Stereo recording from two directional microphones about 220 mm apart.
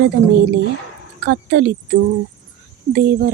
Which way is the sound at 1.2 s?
50° right (ahead or behind).